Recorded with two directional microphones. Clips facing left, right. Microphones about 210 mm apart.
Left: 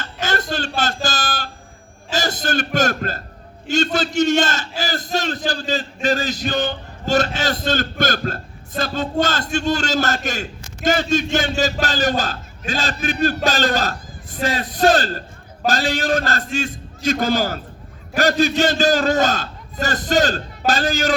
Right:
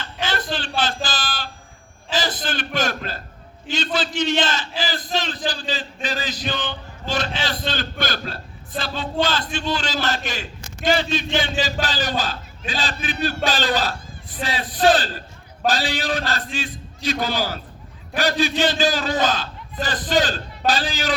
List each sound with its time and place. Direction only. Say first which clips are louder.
0.0 s a sound: left 3 dB; 45° left (ahead or behind)
5.5 s music: left 4 dB; 45° left (ahead or behind)
10.8 s a man's voice: left 3 dB; 45° left (ahead or behind)